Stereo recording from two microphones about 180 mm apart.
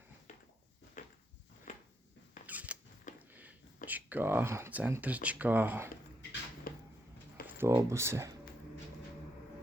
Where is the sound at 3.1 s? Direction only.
45° left (ahead or behind).